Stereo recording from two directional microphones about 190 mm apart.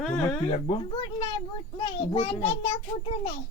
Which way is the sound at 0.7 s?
25° left (ahead or behind).